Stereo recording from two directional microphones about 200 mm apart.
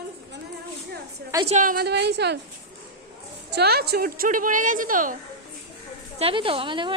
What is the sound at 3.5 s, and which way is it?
A woman's voice, 55° right (ahead or behind).